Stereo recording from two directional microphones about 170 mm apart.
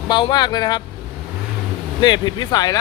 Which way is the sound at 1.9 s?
25° left (ahead or behind).